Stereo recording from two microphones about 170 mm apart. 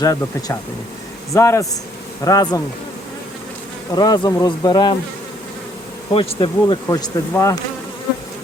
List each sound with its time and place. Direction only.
0.0 s speech: 20° left (ahead or behind)
3.9 s speech: 25° left (ahead or behind)
6.1 s speech: 30° left (ahead or behind)